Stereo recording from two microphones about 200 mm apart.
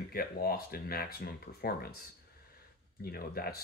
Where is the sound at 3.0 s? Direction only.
50° left (ahead or behind).